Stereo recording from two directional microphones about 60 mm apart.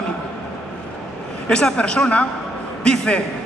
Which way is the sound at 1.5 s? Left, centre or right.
Centre.